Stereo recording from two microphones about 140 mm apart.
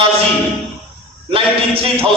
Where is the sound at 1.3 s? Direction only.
40° right (ahead or behind).